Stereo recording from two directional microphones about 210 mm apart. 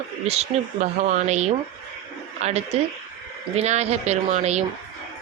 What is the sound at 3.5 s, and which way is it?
Speech, 30° right (ahead or behind).